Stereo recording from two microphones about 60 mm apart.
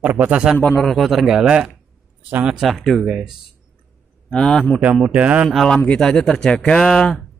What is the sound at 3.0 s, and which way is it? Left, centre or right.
Speech, centre.